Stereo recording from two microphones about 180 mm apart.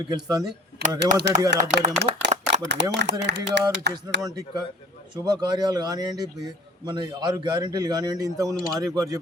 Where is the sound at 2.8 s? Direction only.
80° right.